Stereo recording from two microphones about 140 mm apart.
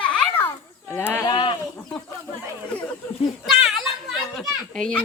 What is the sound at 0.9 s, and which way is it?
Sheep, 15° left (ahead or behind).